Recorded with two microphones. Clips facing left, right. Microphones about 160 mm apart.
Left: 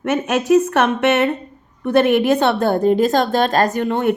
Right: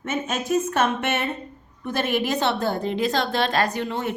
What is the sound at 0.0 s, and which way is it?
A woman's voice, 70° left (ahead or behind).